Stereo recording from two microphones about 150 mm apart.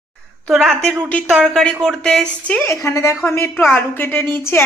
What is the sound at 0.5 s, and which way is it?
Speech, centre (ahead or behind).